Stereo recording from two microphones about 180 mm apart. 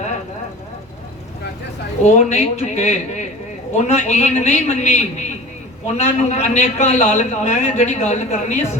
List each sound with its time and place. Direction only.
2.0 s a man's voice: 40° left (ahead or behind)